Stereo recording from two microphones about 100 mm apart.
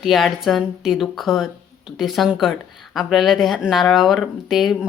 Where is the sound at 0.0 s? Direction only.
Centre (ahead or behind).